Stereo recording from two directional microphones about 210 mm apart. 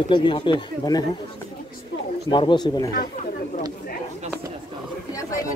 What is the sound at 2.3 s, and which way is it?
Speech, 20° left (ahead or behind).